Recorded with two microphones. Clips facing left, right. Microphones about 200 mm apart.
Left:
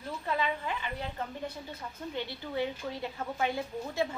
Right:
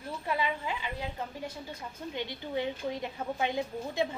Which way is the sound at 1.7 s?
15° right (ahead or behind).